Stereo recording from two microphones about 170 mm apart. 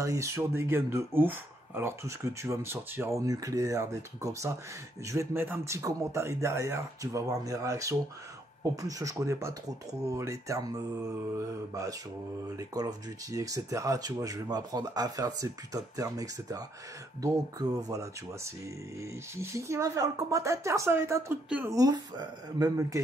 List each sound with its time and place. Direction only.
0.0 s speech: 15° right (ahead or behind)
21.7 s speech: 25° right (ahead or behind)